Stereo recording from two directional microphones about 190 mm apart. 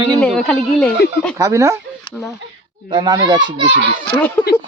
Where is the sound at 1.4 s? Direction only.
15° right (ahead or behind).